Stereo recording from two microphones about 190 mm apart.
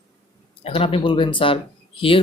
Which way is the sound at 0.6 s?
30° left (ahead or behind).